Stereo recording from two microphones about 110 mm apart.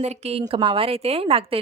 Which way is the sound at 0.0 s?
75° right (ahead or behind).